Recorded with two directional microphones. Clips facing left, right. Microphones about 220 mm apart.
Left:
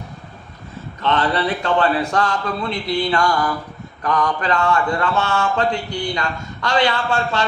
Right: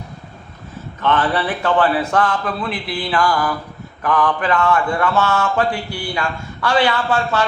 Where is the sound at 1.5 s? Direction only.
25° left (ahead or behind).